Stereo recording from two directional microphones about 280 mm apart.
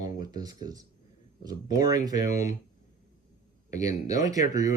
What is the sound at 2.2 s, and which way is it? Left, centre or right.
Speech, left.